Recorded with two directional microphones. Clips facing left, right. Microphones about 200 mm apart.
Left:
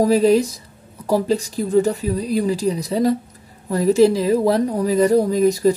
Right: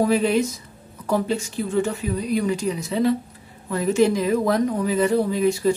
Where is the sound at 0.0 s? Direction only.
35° left (ahead or behind).